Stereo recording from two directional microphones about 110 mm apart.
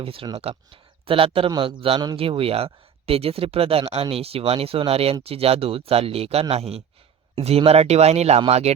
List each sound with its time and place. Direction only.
0.0 s speech: 55° right (ahead or behind)
1.5 s a man's voice: 45° right (ahead or behind); by 8.7 s 70° right (ahead or behind)